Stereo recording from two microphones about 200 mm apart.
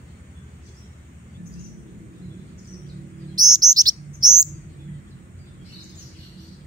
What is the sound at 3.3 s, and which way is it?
Chirp, 20° right (ahead or behind).